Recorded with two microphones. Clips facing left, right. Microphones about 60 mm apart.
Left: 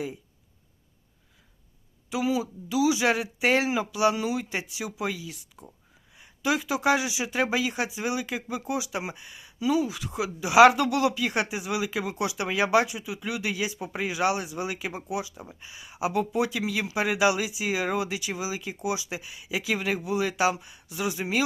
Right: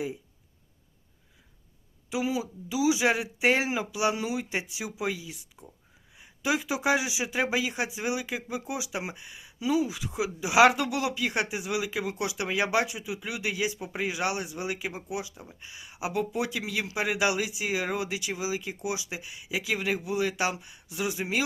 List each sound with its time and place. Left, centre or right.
2.0 s speech: centre